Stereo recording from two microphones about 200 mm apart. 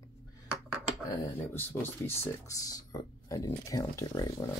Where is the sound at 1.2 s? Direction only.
10° left (ahead or behind).